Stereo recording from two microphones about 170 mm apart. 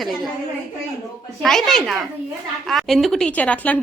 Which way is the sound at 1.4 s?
Centre (ahead or behind).